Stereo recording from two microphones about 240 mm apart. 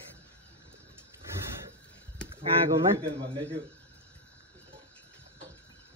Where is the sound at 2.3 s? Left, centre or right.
Right.